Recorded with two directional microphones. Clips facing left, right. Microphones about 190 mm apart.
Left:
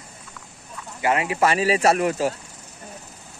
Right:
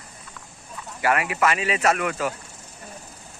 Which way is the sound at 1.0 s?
25° left (ahead or behind).